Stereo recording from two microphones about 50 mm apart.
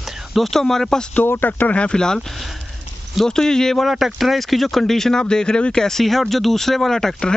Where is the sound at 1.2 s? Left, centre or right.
Left.